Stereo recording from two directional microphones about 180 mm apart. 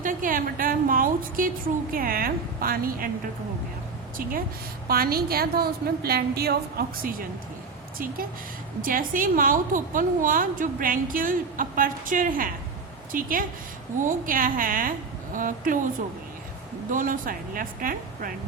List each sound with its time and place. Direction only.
0.0 s a sound: 50° right (ahead or behind)
1.9 s a woman's voice: 50° right (ahead or behind)
4.9 s a woman's voice: 55° right (ahead or behind)
16.9 s a woman's voice: 50° right (ahead or behind)